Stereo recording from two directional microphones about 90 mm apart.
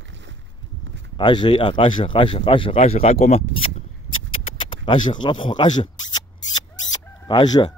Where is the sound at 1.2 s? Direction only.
60° left (ahead or behind); by 3.0 s 80° left.